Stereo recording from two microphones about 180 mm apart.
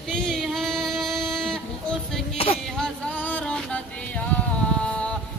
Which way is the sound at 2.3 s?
35° left (ahead or behind).